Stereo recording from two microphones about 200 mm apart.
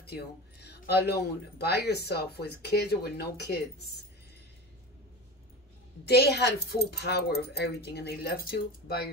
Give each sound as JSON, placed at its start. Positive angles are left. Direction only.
{"t": 0.0, "sound": "speech", "side_deg": 55}
{"t": 6.0, "sound": "speech", "side_deg": 55}